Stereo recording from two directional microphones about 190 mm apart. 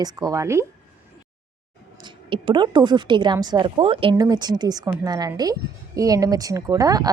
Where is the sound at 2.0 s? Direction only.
25° right (ahead or behind).